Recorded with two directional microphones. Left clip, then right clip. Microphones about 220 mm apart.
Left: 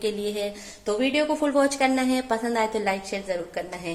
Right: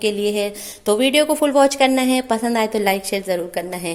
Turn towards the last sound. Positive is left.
turn(degrees=-55)  # may be behind; listen again after turning